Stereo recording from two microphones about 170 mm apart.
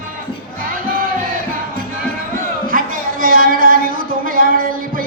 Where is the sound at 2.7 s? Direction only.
55° right (ahead or behind).